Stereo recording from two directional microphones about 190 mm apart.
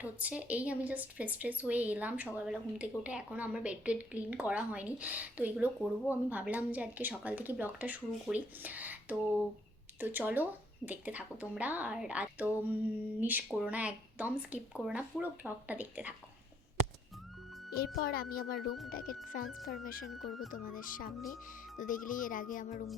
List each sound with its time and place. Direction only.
0.0 s speech: 5° right (ahead or behind)
17.7 s speech: 55° left (ahead or behind)